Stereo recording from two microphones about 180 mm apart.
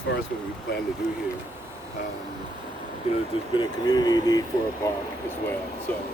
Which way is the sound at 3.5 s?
20° left (ahead or behind).